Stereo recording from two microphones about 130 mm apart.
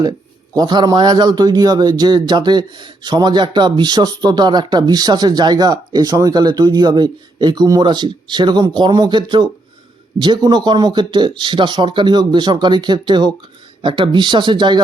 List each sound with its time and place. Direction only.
0.5 s a man's voice: 35° right (ahead or behind)